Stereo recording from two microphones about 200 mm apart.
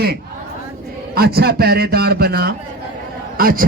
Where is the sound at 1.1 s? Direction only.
50° right (ahead or behind).